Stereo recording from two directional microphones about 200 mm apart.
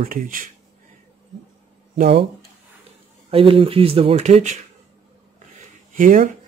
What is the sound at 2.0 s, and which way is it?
Speech, 30° right (ahead or behind).